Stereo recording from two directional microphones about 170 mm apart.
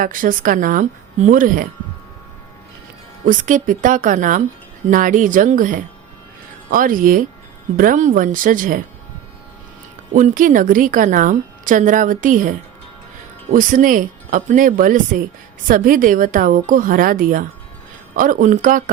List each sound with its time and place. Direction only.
0.0 s a woman's voice: 55° right (ahead or behind)
3.2 s a woman's voice: 50° right (ahead or behind)
10.1 s a woman's voice: 50° right (ahead or behind)